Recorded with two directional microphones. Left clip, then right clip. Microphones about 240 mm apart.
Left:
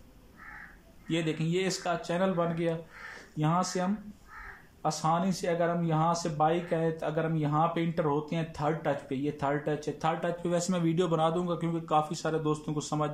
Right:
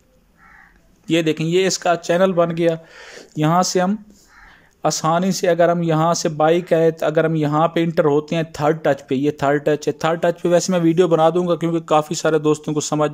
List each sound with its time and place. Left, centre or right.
1.0 s speech: right